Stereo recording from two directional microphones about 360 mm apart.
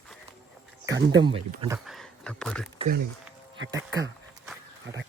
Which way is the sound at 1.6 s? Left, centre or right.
Centre.